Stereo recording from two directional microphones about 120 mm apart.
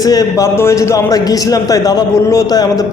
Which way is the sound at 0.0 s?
30° left (ahead or behind).